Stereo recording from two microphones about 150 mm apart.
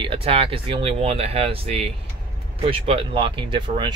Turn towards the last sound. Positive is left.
turn(degrees=-30)  # may be behind; listen again after turning